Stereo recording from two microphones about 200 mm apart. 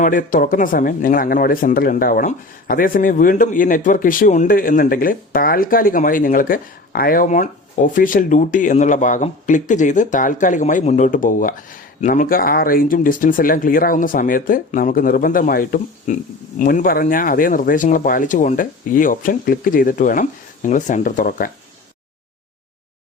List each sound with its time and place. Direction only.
0.0 s speech: 40° left (ahead or behind)